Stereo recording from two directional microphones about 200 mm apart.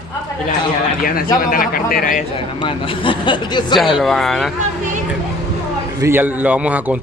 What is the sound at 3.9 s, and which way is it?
Speech, centre (ahead or behind).